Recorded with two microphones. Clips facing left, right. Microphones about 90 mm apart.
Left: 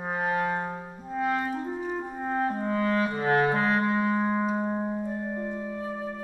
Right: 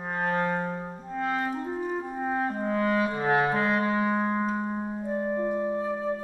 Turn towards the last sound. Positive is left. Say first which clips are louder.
# right 6 dB
turn(degrees=-25)  # may be behind; listen again after turning